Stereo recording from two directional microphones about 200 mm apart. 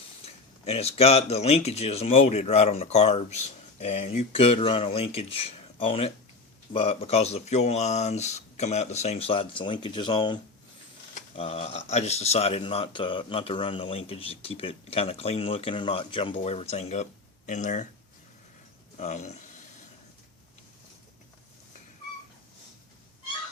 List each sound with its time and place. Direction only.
0.6 s speech: 30° left (ahead or behind)
18.9 s speech: 35° left (ahead or behind)